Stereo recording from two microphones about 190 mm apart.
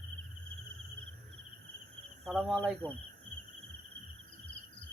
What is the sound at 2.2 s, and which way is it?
Speech, centre (ahead or behind).